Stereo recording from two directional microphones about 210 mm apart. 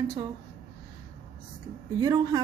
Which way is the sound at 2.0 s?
20° right (ahead or behind).